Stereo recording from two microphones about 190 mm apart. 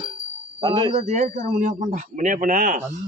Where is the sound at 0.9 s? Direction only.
35° right (ahead or behind).